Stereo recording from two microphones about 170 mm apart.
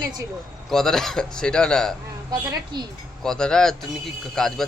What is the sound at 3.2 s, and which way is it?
A man's voice, 5° left (ahead or behind).